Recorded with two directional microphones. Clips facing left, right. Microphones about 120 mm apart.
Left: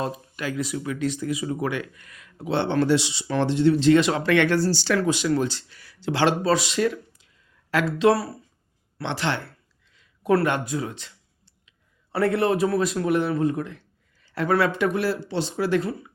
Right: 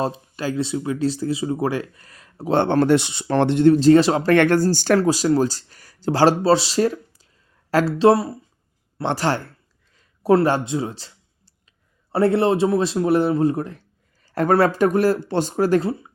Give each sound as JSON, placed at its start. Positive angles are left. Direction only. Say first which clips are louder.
{"t": 0.0, "sound": "speech", "louder": "right 4 dB", "side_deg": -30}
{"t": 4.9, "sound": "speech", "louder": "right 4 dB", "side_deg": -35}
{"t": 9.0, "sound": "speech", "louder": "right 5 dB", "side_deg": -40}
{"t": 9.9, "sound": "a sound", "louder": "right 5 dB", "side_deg": -40}
{"t": 10.3, "sound": "a sound", "louder": "right 4 dB", "side_deg": -30}
{"t": 12.1, "sound": "speech", "louder": "right 4 dB", "side_deg": -30}
{"t": 15.8, "sound": "speech", "louder": "right 4 dB", "side_deg": -30}